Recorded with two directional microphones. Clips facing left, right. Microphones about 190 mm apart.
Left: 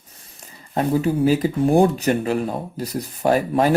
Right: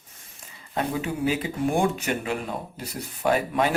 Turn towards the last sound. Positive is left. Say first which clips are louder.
# left 5 dB
turn(degrees=40)  # may be behind; listen again after turning